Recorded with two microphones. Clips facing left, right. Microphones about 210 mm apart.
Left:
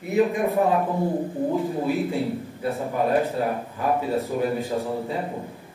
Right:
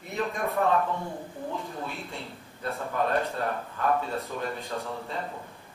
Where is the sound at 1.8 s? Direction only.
5° left (ahead or behind).